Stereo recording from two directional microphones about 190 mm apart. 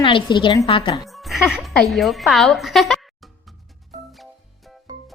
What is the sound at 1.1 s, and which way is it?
Music, centre (ahead or behind).